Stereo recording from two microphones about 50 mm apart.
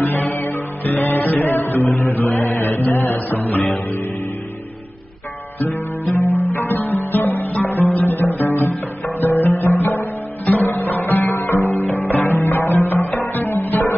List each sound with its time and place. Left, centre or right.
0.0 s music: left
2.0 s music: left
6.1 s music: left
6.7 s music: left
10.4 s music: left
11.7 s music: left